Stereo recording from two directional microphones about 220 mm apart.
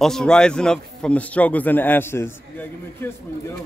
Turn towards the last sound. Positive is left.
turn(degrees=10)  # may be behind; listen again after turning